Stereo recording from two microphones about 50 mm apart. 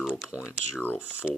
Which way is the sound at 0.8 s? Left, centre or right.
Left.